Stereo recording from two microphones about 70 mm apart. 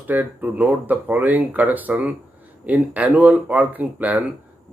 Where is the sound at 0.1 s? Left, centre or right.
Right.